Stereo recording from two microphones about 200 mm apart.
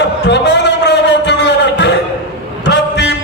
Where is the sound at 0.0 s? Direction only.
60° left (ahead or behind).